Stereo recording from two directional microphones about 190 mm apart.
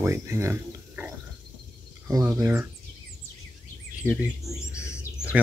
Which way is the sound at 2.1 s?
15° right (ahead or behind).